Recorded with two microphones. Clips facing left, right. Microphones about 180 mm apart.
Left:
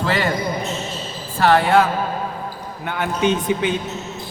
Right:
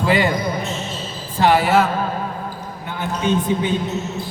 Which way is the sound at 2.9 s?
75° left (ahead or behind).